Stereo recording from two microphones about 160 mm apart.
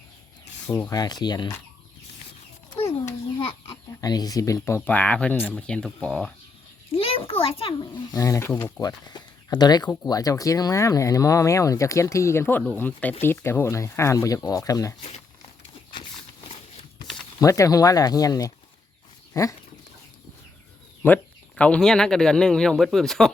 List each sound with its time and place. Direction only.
0.7 s speech: 10° left (ahead or behind)
0.9 s speech: 25° left (ahead or behind)
3.7 s speech: 25° left (ahead or behind); by 6.3 s centre (ahead or behind)
6.9 s a child's voice: 35° left (ahead or behind); by 8.7 s 15° left (ahead or behind)
8.8 s speech: 25° left (ahead or behind)
17.4 s speech: 20° left (ahead or behind)
21.0 s speech: 10° left (ahead or behind)